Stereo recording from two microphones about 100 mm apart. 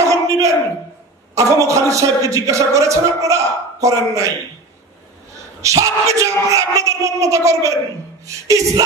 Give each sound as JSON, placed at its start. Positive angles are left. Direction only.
{"t": 0.0, "sound": "a sound", "side_deg": -30}
{"t": 1.3, "sound": "speech", "side_deg": -30}
{"t": 5.6, "sound": "speech", "side_deg": -30}